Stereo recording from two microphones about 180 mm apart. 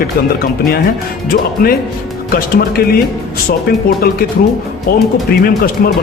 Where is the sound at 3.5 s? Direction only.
55° left (ahead or behind).